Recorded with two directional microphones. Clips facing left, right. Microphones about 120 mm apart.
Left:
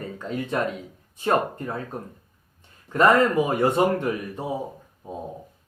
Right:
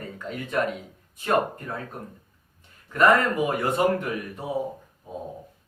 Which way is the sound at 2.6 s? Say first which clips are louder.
Left 1 dB; 25° left (ahead or behind).